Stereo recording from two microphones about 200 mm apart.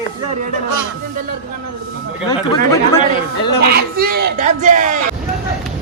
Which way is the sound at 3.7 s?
50° right (ahead or behind).